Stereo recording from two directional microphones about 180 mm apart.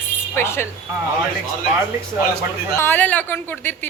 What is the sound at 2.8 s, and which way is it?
A woman's voice, 10° left (ahead or behind).